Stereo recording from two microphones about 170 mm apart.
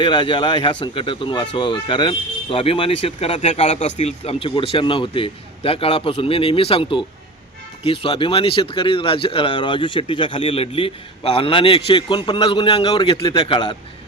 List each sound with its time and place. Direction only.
0.0 s speech: 30° left (ahead or behind)